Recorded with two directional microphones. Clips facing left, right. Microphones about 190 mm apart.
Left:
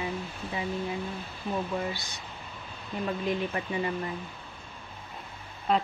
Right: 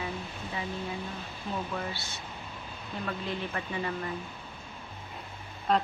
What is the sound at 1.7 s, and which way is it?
A woman's voice, 15° left (ahead or behind).